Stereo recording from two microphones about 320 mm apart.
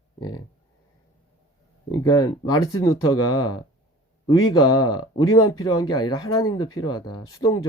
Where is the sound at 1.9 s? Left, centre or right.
Centre.